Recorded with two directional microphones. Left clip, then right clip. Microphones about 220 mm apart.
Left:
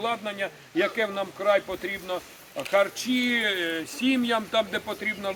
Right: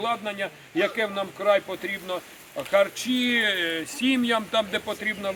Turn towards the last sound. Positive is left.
turn(degrees=-25)  # may be behind; listen again after turning